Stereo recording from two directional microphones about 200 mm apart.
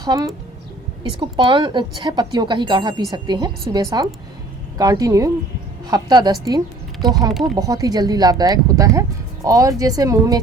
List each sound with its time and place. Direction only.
0.0 s speech: 20° right (ahead or behind)